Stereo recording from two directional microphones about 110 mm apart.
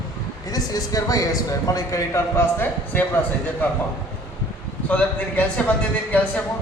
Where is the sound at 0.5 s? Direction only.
35° left (ahead or behind); by 3.8 s 15° left (ahead or behind).